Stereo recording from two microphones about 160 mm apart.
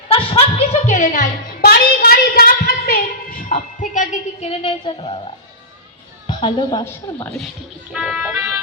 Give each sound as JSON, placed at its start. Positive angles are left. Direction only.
{"t": 0.1, "sound": "chuckle", "side_deg": 40}
{"t": 1.6, "sound": "a sound", "side_deg": 70}
{"t": 6.2, "sound": "a woman's voice", "side_deg": 30}
{"t": 7.9, "sound": "speech", "side_deg": -5}